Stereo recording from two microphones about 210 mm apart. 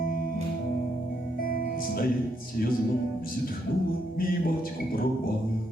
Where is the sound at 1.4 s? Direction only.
45° left (ahead or behind).